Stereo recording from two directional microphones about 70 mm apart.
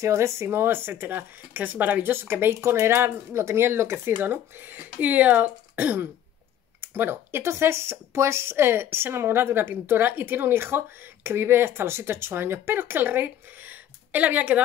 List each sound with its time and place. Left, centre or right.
0.0 s speech: right